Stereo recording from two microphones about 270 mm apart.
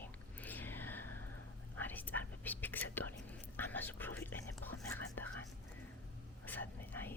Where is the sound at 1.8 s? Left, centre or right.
Centre.